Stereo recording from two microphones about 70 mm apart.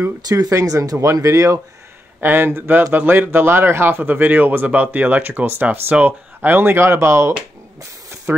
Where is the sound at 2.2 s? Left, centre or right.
Right.